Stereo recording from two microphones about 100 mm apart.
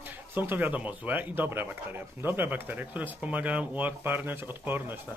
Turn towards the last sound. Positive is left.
turn(degrees=-20)  # may be behind; listen again after turning